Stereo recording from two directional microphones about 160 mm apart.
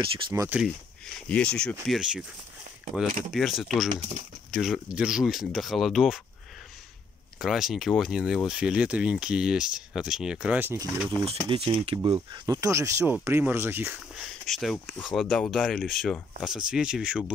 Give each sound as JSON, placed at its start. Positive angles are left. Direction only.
{"t": 0.3, "sound": "speech", "side_deg": -15}
{"t": 1.3, "sound": "speech", "side_deg": 5}
{"t": 7.3, "sound": "speech", "side_deg": 0}
{"t": 11.1, "sound": "speech", "side_deg": -30}